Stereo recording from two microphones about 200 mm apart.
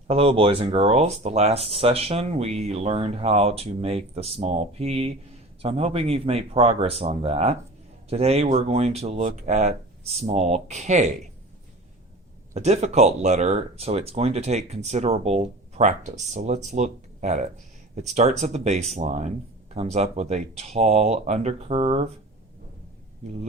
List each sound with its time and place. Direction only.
0.1 s speech: 30° right (ahead or behind)
12.5 s speech: 35° right (ahead or behind)